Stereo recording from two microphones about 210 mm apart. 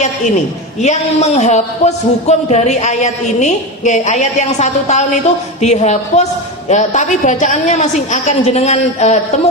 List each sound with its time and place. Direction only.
0.8 s speech: 35° left (ahead or behind)